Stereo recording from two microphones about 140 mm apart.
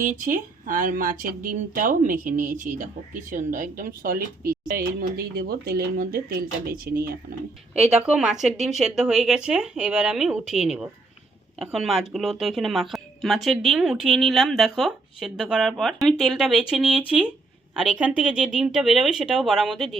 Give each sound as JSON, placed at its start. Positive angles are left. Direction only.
{"t": 0.0, "sound": "speech", "side_deg": -70}
{"t": 7.9, "sound": "speech", "side_deg": -5}